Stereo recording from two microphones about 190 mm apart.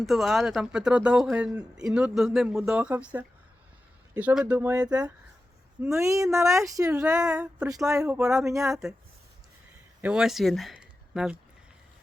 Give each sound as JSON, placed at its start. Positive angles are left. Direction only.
{"t": 0.0, "sound": "speech", "side_deg": 0}
{"t": 7.3, "sound": "speech", "side_deg": -5}
{"t": 8.4, "sound": "speech", "side_deg": -15}
{"t": 8.7, "sound": "speech", "side_deg": 0}
{"t": 10.0, "sound": "speech", "side_deg": -5}